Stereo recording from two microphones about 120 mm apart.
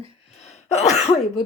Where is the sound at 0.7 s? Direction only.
65° left (ahead or behind).